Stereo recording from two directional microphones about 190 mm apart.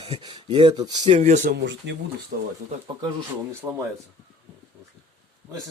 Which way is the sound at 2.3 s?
55° right (ahead or behind).